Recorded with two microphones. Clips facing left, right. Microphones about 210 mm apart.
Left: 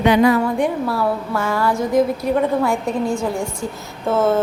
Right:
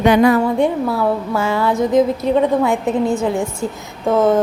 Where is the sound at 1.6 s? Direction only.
20° right (ahead or behind).